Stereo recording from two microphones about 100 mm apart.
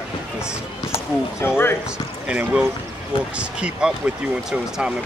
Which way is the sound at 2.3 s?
15° right (ahead or behind).